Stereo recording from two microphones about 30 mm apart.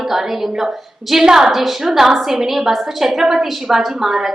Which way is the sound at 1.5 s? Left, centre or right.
Centre.